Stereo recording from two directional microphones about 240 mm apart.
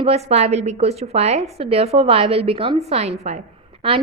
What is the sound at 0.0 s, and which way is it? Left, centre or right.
A woman's voice, right.